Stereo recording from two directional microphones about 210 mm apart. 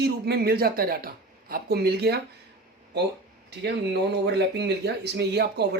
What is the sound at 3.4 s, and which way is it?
Speech, 55° right (ahead or behind).